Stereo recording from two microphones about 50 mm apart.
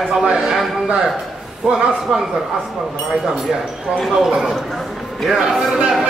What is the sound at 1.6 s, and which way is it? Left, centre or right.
Speech, centre.